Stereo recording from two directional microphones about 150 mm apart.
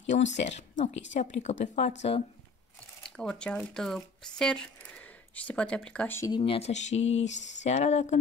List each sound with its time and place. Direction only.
0.1 s speech: 55° left (ahead or behind)
3.0 s speech: 5° left (ahead or behind)
6.3 s speech: 40° left (ahead or behind)